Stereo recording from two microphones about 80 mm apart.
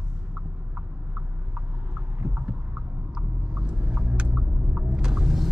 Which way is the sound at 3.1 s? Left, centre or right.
Centre.